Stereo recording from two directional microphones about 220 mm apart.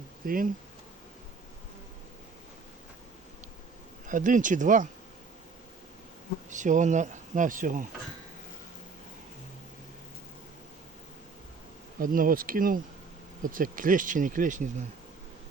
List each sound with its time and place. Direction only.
0.2 s speech: 40° right (ahead or behind)
4.0 s speech: 35° right (ahead or behind)
6.5 s speech: 35° right (ahead or behind)
11.9 s speech: 40° right (ahead or behind)